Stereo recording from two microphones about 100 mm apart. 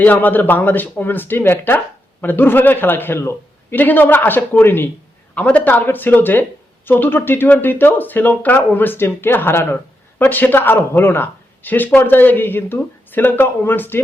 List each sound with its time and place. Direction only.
0.0 s speech: 20° left (ahead or behind)